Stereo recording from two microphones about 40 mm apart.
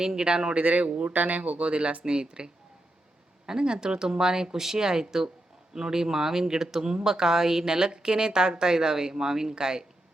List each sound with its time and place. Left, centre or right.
0.0 s speech: centre
0.5 s speech: right
1.1 s speech: right
1.4 s speech: right
2.1 s speech: right